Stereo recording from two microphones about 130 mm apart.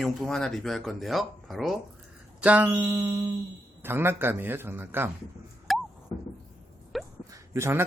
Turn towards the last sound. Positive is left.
turn(degrees=-20)  # may be behind; listen again after turning